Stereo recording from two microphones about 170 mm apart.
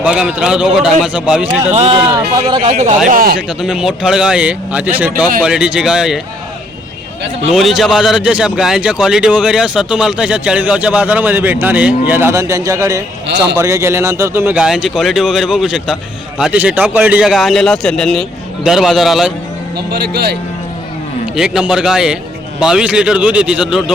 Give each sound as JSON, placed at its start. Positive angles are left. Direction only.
{"t": 0.0, "sound": "a man's voice", "side_deg": -5}
{"t": 1.7, "sound": "speech", "side_deg": -40}
{"t": 3.1, "sound": "speech", "side_deg": -60}
{"t": 3.6, "sound": "a man's voice", "side_deg": -5}
{"t": 7.5, "sound": "a man's voice", "side_deg": 0}
{"t": 13.2, "sound": "a man's voice", "side_deg": -90}
{"t": 13.6, "sound": "a man's voice", "side_deg": -15}
{"t": 19.7, "sound": "speech", "side_deg": -70}
{"t": 21.3, "sound": "a man's voice", "side_deg": -5}